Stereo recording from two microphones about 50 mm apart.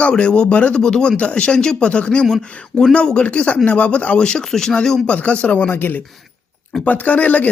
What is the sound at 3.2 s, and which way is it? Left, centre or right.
A man's voice, left.